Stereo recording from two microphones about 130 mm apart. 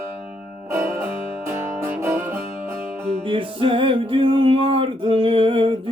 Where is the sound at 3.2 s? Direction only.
40° right (ahead or behind).